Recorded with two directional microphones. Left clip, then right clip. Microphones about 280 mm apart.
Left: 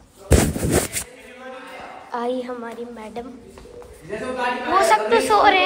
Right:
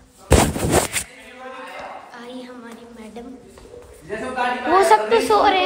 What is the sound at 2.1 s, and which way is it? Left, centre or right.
A woman's voice, centre.